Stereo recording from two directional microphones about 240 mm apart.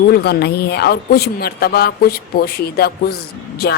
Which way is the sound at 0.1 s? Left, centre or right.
Left.